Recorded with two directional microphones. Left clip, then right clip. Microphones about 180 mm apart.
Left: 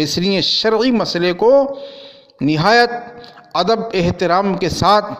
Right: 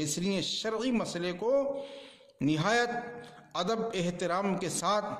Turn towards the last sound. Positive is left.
turn(degrees=35)  # may be behind; listen again after turning